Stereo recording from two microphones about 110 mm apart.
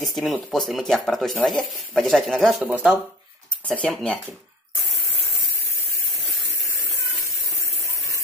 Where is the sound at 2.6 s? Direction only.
15° right (ahead or behind).